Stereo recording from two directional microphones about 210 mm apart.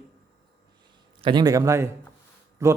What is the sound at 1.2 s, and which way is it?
A man's voice, 20° right (ahead or behind).